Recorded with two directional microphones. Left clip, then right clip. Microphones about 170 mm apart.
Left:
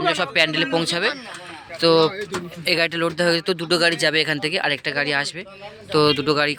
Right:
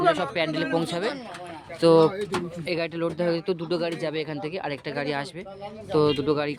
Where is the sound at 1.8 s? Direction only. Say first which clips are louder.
Left 1 dB; 20° right (ahead or behind).